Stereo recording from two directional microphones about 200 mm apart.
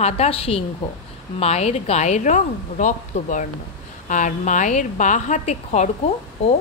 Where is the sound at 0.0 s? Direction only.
30° left (ahead or behind).